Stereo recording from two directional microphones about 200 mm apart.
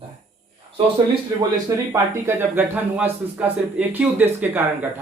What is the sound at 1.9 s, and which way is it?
Speech, 10° right (ahead or behind).